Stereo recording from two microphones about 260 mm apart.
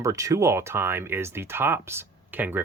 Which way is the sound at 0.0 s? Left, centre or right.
Centre.